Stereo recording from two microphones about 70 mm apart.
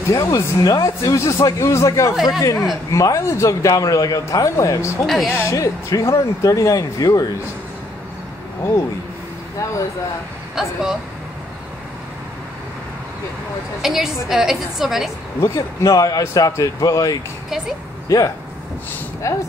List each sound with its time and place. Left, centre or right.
0.1 s a man's voice: left
5.0 s a woman's voice: centre
5.4 s a man's voice: left
10.5 s a woman's voice: centre
13.7 s a woman's voice: centre
15.4 s a man's voice: left